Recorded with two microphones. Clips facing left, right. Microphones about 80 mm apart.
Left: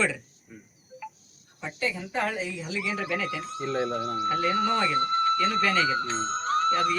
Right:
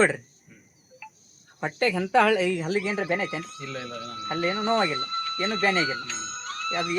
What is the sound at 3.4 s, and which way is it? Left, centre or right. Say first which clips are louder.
Speech: left 6 dB; left.